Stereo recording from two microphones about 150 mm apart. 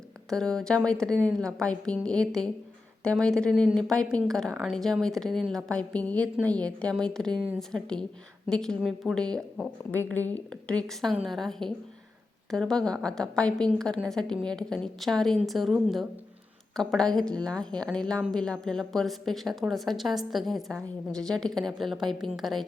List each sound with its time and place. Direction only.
0.3 s a woman's voice: 5° left (ahead or behind)